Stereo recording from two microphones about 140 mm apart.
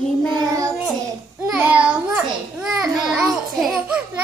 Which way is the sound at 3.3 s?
5° right (ahead or behind).